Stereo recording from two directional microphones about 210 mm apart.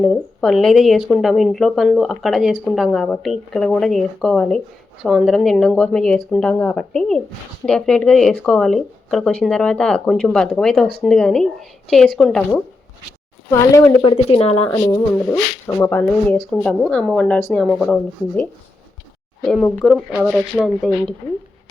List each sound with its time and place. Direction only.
0.0 s a woman's voice: centre (ahead or behind)
13.5 s speech: 15° left (ahead or behind)
14.1 s speech: 30° left (ahead or behind)
14.7 s a woman's voice: 15° left (ahead or behind)
19.5 s a woman's voice: centre (ahead or behind)